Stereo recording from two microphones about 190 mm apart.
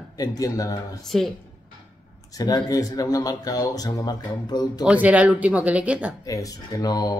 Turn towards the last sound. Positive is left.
turn(degrees=20)  # may be behind; listen again after turning